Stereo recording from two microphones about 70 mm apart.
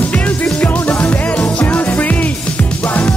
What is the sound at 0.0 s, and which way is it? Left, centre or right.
Music, centre.